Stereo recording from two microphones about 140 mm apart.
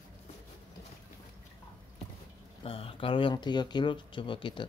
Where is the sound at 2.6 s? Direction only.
40° left (ahead or behind).